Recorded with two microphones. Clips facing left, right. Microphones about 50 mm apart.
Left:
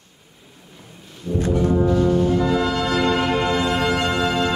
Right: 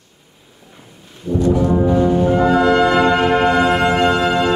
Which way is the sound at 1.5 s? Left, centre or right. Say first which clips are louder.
Right 3 dB; right.